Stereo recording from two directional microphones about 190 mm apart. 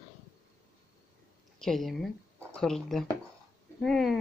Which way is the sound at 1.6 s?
Centre (ahead or behind).